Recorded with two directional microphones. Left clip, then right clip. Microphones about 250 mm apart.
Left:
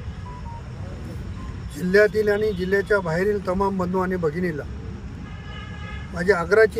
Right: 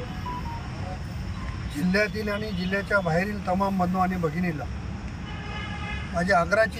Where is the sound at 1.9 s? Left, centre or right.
Centre.